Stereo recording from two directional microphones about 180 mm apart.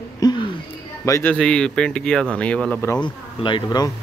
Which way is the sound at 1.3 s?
5° left (ahead or behind).